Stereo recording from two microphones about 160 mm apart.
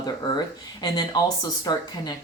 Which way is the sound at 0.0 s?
25° left (ahead or behind).